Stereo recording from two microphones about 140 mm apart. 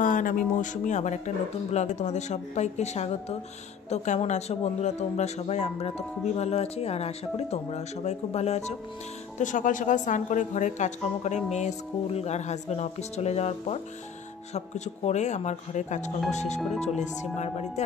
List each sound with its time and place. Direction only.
0.0 s speech: 70° left (ahead or behind); by 8.7 s 50° left (ahead or behind)
9.4 s speech: 65° left (ahead or behind)